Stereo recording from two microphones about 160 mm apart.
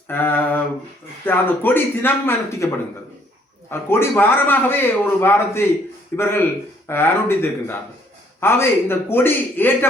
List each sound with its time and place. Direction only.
0.1 s a sound: 15° left (ahead or behind)
1.2 s a man's voice: 15° left (ahead or behind)
3.7 s a man's voice: 15° left (ahead or behind)